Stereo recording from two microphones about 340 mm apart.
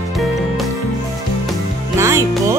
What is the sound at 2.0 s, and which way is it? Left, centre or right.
Music, centre.